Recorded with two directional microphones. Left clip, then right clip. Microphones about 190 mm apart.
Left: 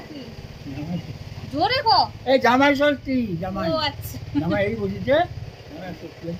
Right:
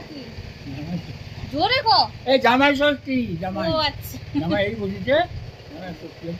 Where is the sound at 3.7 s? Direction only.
25° right (ahead or behind).